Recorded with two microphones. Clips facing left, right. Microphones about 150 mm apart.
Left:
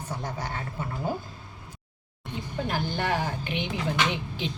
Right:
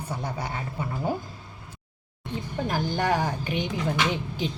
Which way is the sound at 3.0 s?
40° right (ahead or behind).